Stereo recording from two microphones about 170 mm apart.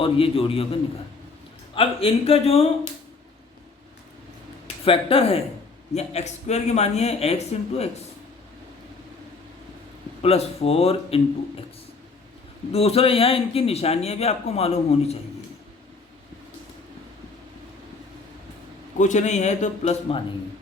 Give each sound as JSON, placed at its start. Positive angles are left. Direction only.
{"t": 0.0, "sound": "a man's voice", "side_deg": 30}
{"t": 4.9, "sound": "a man's voice", "side_deg": 35}
{"t": 10.2, "sound": "a man's voice", "side_deg": 35}
{"t": 12.7, "sound": "a man's voice", "side_deg": 35}
{"t": 18.9, "sound": "a man's voice", "side_deg": 45}